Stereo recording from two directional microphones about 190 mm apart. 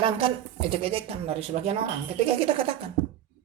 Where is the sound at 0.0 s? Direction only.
30° right (ahead or behind).